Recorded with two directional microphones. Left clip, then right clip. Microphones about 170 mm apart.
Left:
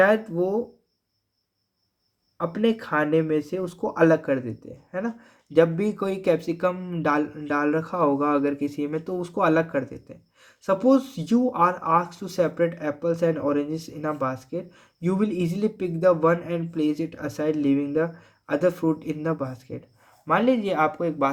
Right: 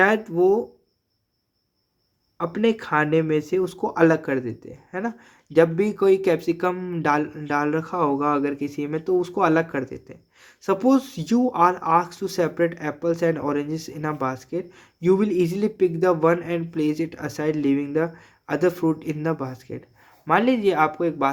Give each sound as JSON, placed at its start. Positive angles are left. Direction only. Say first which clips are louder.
{"t": 0.0, "sound": "speech", "louder": "right 2 dB", "side_deg": -40}
{"t": 2.4, "sound": "speech", "louder": "right 2 dB", "side_deg": -40}